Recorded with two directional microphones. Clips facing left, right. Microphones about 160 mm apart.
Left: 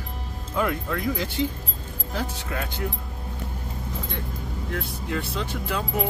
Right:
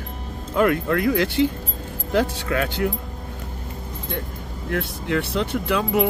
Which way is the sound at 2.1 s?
90° right.